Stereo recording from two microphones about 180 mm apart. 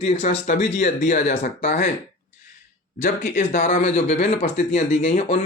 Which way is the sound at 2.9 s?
45° left (ahead or behind).